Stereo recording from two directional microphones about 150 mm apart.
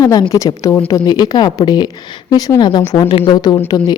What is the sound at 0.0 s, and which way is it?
Speech, 20° left (ahead or behind).